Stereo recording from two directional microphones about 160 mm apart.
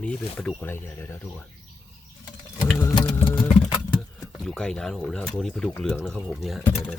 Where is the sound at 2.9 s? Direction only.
20° left (ahead or behind).